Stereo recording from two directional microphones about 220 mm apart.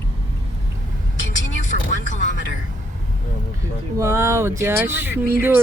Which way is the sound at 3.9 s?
15° right (ahead or behind).